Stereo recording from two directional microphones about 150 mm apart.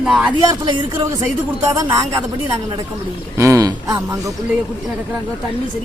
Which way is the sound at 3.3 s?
20° right (ahead or behind).